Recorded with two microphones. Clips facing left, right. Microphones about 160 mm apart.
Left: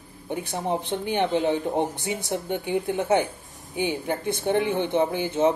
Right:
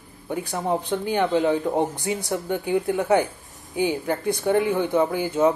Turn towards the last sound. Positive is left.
turn(degrees=25)  # may be behind; listen again after turning